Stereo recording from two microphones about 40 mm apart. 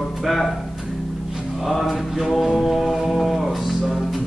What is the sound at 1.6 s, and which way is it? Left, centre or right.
Speech, centre.